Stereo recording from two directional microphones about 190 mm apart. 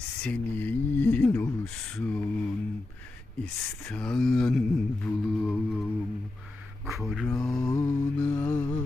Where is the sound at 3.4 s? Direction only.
5° left (ahead or behind).